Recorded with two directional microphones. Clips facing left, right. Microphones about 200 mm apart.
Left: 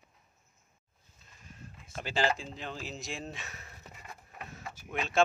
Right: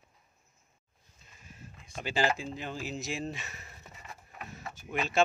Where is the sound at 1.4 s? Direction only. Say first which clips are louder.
Left 1 dB; 5° right (ahead or behind).